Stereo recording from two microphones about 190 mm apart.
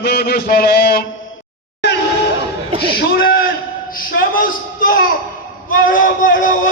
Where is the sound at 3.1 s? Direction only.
50° left (ahead or behind).